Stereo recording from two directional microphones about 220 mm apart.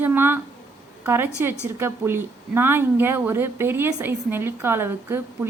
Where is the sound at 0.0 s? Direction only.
10° right (ahead or behind).